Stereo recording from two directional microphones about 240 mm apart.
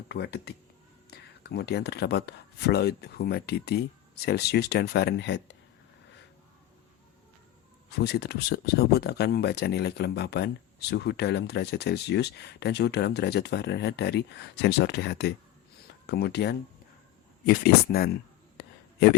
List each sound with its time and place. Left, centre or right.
0.1 s speech: left
7.9 s speech: left
18.5 s a sound: left